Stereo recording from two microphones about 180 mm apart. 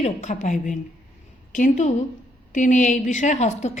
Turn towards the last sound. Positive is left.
turn(degrees=40)  # may be behind; listen again after turning